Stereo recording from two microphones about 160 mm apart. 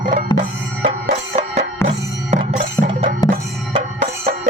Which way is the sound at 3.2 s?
25° left (ahead or behind).